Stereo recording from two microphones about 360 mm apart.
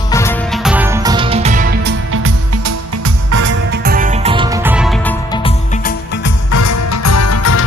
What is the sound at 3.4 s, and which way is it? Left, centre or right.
Music, right.